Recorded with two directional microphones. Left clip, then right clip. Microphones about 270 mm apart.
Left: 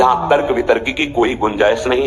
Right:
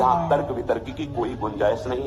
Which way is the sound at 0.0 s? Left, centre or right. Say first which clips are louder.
Left 7 dB; left.